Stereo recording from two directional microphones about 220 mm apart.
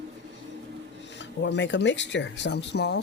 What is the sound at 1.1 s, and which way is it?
Speech, 55° left (ahead or behind).